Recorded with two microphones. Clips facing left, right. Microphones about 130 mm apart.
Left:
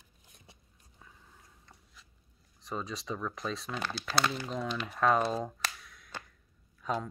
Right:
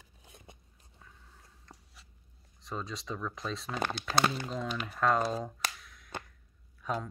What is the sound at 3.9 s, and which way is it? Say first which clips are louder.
Speech: right 1 dB; 50° right (ahead or behind).